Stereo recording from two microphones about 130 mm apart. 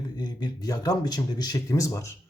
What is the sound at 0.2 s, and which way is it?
Speech, 30° left (ahead or behind).